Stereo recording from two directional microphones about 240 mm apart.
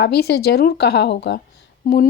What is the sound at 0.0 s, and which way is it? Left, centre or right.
Speech, left.